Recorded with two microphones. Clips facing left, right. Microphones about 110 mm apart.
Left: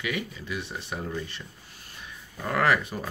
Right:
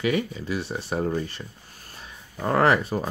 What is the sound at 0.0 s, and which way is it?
Speech, 35° right (ahead or behind).